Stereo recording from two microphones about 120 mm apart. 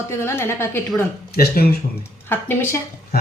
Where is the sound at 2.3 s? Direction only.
20° left (ahead or behind).